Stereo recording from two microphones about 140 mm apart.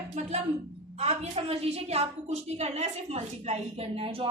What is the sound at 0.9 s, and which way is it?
A woman's voice, 45° right (ahead or behind).